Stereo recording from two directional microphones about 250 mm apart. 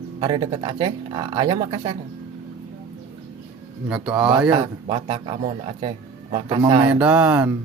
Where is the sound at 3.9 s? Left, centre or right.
Centre.